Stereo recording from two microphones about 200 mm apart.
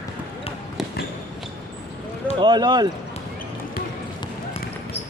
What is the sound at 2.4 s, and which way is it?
Speech, 20° right (ahead or behind).